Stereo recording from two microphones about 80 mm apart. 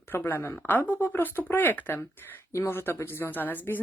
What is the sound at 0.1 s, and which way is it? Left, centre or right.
Speech, left.